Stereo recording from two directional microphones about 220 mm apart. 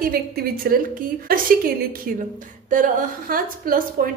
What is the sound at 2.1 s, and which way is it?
A woman's voice, 40° right (ahead or behind).